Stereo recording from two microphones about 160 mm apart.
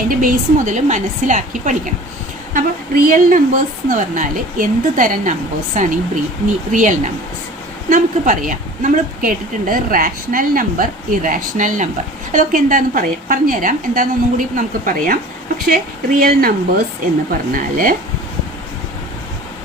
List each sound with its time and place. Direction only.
0.1 s a woman's voice: 60° right (ahead or behind)